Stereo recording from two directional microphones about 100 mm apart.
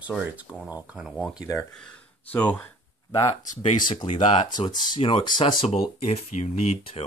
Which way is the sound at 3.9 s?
75° left (ahead or behind).